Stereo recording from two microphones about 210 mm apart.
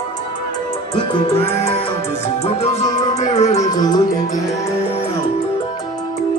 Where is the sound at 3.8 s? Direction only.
20° left (ahead or behind).